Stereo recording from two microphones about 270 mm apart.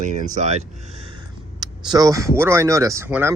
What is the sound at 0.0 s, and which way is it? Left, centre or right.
Speech, right.